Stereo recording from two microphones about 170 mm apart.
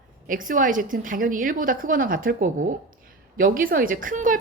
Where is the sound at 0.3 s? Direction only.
50° right (ahead or behind).